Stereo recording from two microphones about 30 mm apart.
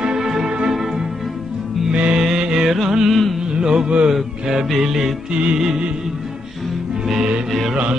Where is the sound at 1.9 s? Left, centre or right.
Right.